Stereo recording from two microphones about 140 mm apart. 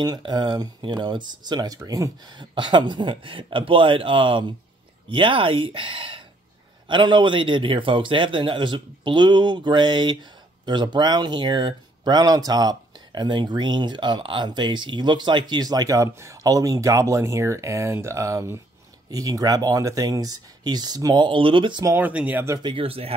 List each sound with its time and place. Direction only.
0.0 s a man's voice: 30° right (ahead or behind)
21.8 s speech: 15° right (ahead or behind)
22.6 s a man's voice: 35° right (ahead or behind)